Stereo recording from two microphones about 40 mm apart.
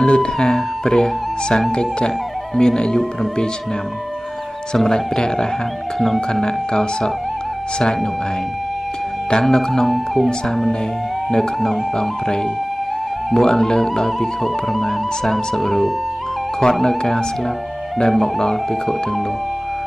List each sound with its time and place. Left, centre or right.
0.0 s speech: left
4.7 s speech: centre
5.9 s speech: centre
6.4 s speech: centre
9.3 s speech: centre
9.8 s speech: centre
11.2 s speech: centre
16.6 s speech: left
17.9 s speech: centre